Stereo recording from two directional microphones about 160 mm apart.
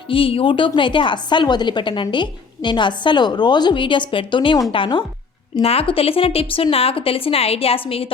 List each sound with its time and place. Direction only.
0.1 s a woman's voice: 35° left (ahead or behind)